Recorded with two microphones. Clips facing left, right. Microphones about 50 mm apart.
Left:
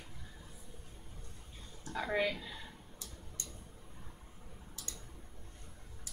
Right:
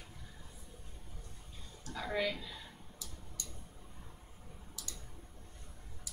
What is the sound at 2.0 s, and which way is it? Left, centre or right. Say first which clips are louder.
Speech: left 2 dB; centre.